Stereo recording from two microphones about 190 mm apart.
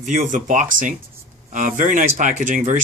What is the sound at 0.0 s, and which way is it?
Speech, 40° right (ahead or behind).